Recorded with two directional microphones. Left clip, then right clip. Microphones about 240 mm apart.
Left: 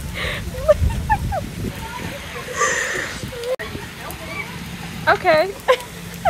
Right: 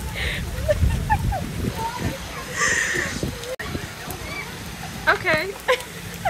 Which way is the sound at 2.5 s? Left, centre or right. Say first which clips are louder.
Left 1 dB; centre.